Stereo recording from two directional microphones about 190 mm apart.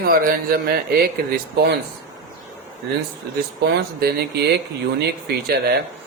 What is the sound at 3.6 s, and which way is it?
Speech, 55° right (ahead or behind).